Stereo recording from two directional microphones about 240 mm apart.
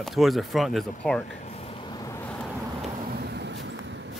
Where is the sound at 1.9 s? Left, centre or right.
Centre.